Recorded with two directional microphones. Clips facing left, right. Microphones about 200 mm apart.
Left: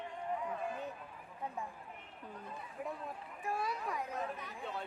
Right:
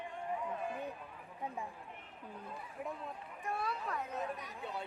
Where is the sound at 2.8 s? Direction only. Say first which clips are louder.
Left 1 dB; centre (ahead or behind).